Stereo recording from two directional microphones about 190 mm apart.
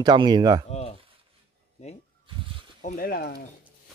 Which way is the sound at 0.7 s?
35° left (ahead or behind).